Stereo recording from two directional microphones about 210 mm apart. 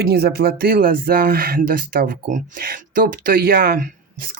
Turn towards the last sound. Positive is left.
turn(degrees=-45)  # may be behind; listen again after turning